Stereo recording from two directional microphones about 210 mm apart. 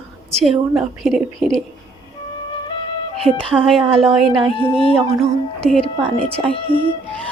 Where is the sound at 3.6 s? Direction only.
Centre (ahead or behind).